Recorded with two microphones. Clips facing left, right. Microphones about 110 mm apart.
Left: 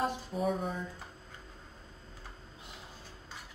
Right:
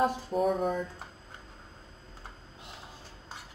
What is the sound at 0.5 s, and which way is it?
Speech, 55° right (ahead or behind).